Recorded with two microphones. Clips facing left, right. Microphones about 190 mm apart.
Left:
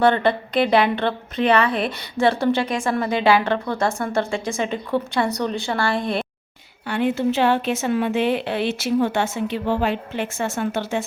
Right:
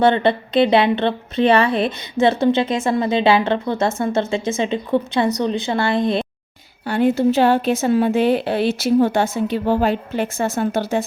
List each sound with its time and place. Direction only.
0.0 s a woman's voice: 25° right (ahead or behind)
6.8 s a woman's voice: 40° right (ahead or behind)